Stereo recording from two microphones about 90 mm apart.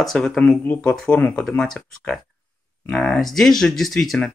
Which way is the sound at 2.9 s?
5° left (ahead or behind).